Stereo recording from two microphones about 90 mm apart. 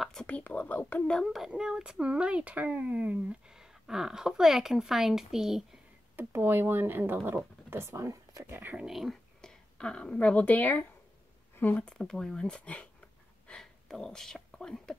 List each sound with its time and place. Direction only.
0.0 s a sound: 5° left (ahead or behind)
0.4 s speech: 15° left (ahead or behind)
1.0 s a child's voice: 5° left (ahead or behind)
6.1 s speech: 25° right (ahead or behind)
8.5 s speech: 20° right (ahead or behind)
8.8 s a woman's voice: centre (ahead or behind); by 10.9 s 20° left (ahead or behind)
11.7 s speech: 10° left (ahead or behind)